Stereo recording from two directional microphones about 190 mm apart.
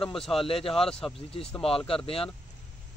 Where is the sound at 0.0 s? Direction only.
Centre (ahead or behind).